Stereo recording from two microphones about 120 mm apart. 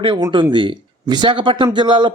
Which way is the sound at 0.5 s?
40° right (ahead or behind).